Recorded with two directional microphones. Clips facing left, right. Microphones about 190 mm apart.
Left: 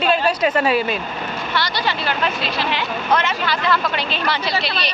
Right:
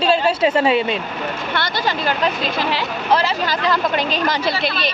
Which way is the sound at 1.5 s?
50° right (ahead or behind).